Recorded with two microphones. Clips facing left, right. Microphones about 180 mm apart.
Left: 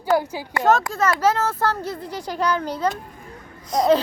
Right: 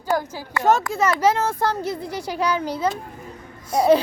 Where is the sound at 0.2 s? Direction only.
15° left (ahead or behind).